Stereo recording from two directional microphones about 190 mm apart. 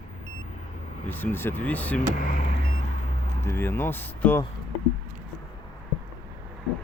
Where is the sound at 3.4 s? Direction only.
10° left (ahead or behind).